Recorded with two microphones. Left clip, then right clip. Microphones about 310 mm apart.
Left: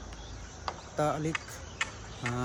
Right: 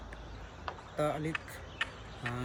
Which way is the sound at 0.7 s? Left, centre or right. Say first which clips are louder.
Left 3 dB; centre.